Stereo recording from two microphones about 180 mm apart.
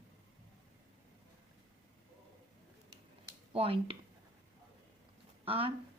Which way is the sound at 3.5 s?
30° right (ahead or behind).